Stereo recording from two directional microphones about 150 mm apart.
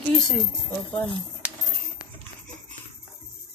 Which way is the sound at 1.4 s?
10° right (ahead or behind).